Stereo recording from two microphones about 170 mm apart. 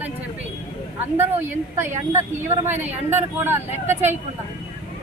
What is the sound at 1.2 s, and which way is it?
Speech, 15° right (ahead or behind).